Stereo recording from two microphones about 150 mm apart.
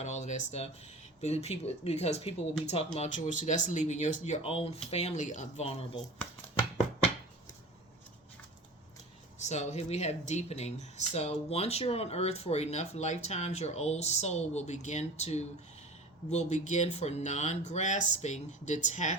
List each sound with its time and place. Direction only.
0.0 s speech: 50° left (ahead or behind)
3.1 s speech: 55° left (ahead or behind)
9.4 s speech: 50° left (ahead or behind)